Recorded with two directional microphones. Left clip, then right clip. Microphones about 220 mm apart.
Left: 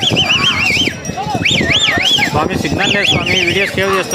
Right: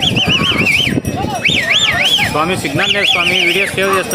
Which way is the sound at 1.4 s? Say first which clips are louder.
Even; 15° right (ahead or behind).